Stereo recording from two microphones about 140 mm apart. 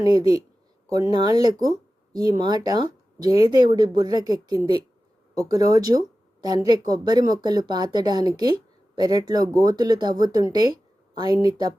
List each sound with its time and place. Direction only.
0.0 s speech: 25° right (ahead or behind)